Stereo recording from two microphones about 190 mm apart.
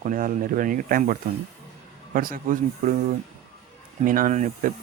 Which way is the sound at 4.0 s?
45° right (ahead or behind).